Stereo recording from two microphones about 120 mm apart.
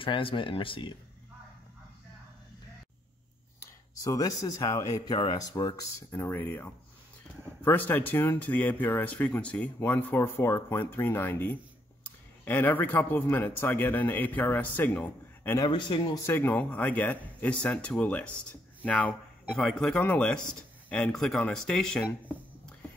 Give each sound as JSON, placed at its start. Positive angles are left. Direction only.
{"t": 0.0, "sound": "speech", "side_deg": 50}
{"t": 3.5, "sound": "speech", "side_deg": 25}
{"t": 15.6, "sound": "speech", "side_deg": 40}
{"t": 16.3, "sound": "speech", "side_deg": 15}